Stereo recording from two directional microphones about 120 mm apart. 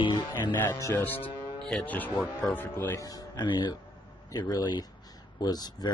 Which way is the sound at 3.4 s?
35° left (ahead or behind).